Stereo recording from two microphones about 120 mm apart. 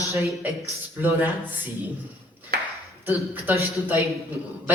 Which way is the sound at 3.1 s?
15° right (ahead or behind).